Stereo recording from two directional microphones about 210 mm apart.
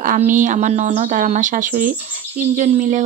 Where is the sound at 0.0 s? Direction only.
35° right (ahead or behind).